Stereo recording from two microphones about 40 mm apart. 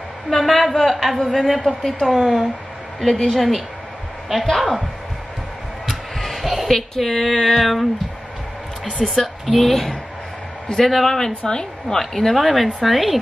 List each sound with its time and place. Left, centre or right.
0.3 s a woman's voice: centre
5.9 s a sound: centre
6.7 s a woman's voice: centre
9.0 s a woman's voice: centre
11.1 s a woman's voice: centre